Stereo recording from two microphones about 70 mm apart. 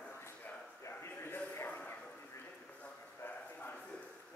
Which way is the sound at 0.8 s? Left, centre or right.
Left.